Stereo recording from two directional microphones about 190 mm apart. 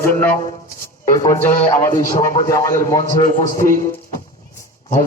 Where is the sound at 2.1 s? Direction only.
45° left (ahead or behind).